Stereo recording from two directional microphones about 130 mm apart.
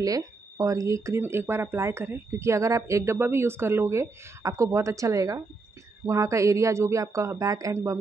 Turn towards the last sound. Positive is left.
turn(degrees=-25)  # may be behind; listen again after turning